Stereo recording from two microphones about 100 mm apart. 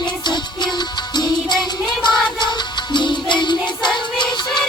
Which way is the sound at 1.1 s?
45° left (ahead or behind).